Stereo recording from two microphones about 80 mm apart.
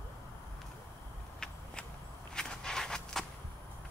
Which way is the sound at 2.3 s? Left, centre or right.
Centre.